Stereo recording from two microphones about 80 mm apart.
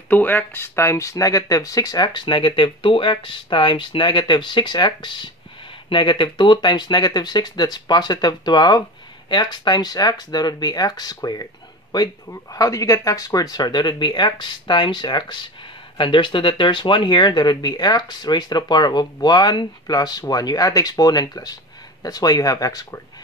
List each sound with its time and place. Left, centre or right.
0.1 s speech: left
5.9 s speech: left
16.0 s speech: left